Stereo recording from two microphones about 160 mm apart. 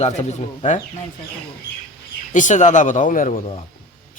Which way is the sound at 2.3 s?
50° left (ahead or behind).